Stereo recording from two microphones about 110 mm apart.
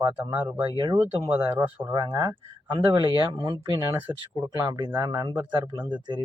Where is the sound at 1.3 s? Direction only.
15° right (ahead or behind).